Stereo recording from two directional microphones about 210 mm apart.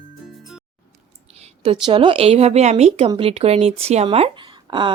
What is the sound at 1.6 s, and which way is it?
A woman's voice, 20° right (ahead or behind).